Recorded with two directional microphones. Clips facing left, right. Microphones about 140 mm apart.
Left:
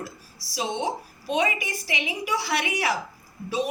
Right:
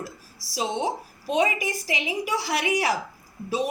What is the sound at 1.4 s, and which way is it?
Speech, 40° right (ahead or behind).